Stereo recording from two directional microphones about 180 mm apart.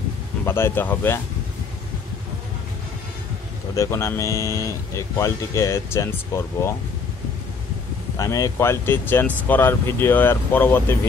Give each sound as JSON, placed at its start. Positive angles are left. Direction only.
{"t": 0.5, "sound": "speech", "side_deg": 15}
{"t": 3.7, "sound": "speech", "side_deg": 15}
{"t": 8.2, "sound": "speech", "side_deg": 15}